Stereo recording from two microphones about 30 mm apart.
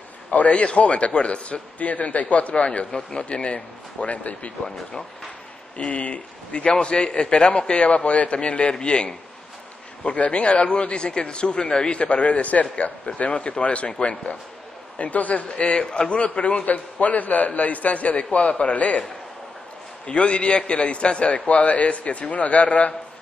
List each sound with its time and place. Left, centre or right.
0.3 s a man's voice: left
3.1 s a man's voice: left
5.8 s a man's voice: left
10.1 s a man's voice: left
12.0 s a man's voice: left
13.0 s a man's voice: left
15.0 s a man's voice: left
15.8 s a man's voice: left
16.2 s a man's voice: left
20.1 s a man's voice: left
21.3 s a man's voice: left